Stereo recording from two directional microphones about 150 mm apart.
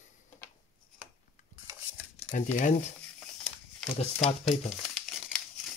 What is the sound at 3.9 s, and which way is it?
Speech, 50° left (ahead or behind).